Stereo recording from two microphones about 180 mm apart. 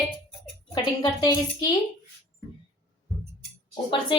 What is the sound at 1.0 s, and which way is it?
Speech, 20° left (ahead or behind).